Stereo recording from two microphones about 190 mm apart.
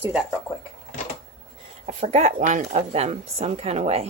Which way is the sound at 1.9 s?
35° right (ahead or behind).